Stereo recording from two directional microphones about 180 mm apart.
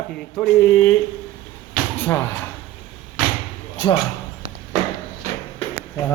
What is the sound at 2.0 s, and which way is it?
Speech, 10° left (ahead or behind).